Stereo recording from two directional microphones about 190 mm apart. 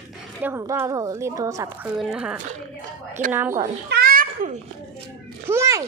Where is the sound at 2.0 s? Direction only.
5° right (ahead or behind).